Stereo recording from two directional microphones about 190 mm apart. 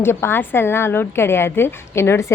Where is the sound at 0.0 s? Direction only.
10° left (ahead or behind).